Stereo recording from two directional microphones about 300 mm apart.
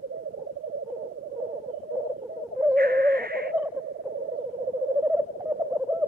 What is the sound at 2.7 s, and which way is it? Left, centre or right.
Bird, right.